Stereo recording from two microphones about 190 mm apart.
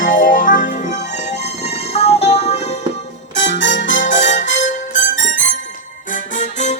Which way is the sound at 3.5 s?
40° left (ahead or behind).